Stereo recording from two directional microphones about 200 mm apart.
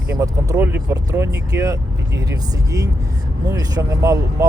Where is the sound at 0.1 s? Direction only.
15° right (ahead or behind).